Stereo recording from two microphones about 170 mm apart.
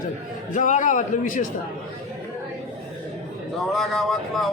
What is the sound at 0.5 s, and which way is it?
Speech, 50° left (ahead or behind).